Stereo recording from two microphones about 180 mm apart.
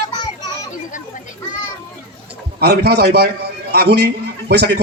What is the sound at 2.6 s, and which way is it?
A man's voice, 60° right (ahead or behind).